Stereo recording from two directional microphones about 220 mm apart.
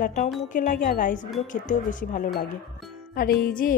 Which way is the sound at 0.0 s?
40° left (ahead or behind).